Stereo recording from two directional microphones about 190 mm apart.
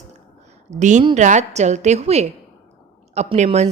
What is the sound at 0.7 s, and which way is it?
A woman's voice, 40° right (ahead or behind).